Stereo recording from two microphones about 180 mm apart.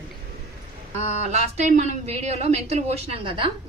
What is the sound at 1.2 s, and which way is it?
A woman's voice, 40° right (ahead or behind).